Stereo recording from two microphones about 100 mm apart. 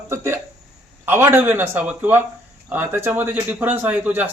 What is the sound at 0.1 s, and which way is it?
A man's voice, 25° right (ahead or behind).